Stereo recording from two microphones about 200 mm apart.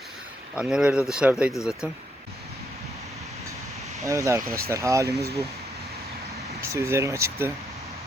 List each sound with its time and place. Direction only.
0.5 s speech: 5° right (ahead or behind)
4.0 s speech: 15° right (ahead or behind)
6.6 s speech: 15° right (ahead or behind)